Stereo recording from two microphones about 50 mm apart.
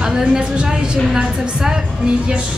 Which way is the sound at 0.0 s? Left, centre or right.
Centre.